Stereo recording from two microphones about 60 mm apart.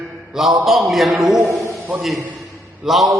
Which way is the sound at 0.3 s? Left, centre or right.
Centre.